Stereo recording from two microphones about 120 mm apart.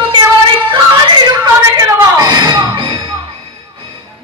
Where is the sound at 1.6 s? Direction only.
25° right (ahead or behind).